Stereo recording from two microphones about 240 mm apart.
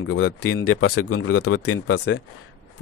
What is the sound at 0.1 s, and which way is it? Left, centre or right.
Speech, left.